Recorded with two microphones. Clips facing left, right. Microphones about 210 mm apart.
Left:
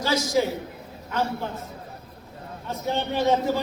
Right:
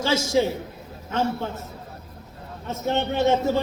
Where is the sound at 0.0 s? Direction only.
25° right (ahead or behind).